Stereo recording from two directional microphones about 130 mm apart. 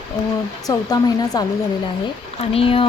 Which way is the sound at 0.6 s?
30° left (ahead or behind).